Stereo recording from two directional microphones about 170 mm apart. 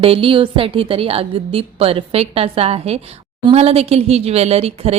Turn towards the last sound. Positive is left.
turn(degrees=-35)  # may be behind; listen again after turning